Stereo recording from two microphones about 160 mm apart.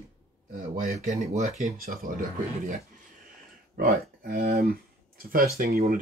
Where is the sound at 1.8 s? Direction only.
65° right (ahead or behind).